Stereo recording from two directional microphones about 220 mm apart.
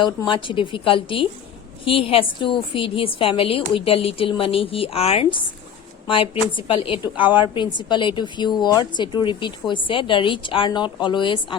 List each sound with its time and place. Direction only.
0.0 s a woman's voice: 20° left (ahead or behind)
7.2 s a woman's voice: 5° right (ahead or behind)
7.5 s a woman's voice: 20° left (ahead or behind)